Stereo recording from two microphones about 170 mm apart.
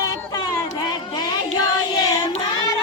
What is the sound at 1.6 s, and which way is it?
Child singing, 20° left (ahead or behind).